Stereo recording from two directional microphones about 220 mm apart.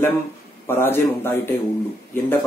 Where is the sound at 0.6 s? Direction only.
10° left (ahead or behind).